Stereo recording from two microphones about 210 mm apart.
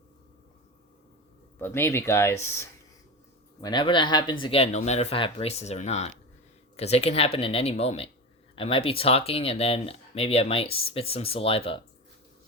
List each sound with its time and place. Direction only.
1.5 s speech: 10° left (ahead or behind); by 11.8 s 25° left (ahead or behind)